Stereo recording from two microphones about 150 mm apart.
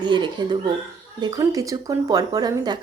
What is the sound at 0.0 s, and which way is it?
Speech, 30° right (ahead or behind).